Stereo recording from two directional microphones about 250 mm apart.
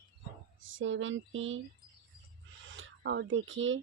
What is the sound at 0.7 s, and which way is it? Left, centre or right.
Speech, right.